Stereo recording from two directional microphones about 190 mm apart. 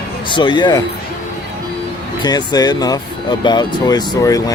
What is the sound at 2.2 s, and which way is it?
Speech, 20° left (ahead or behind).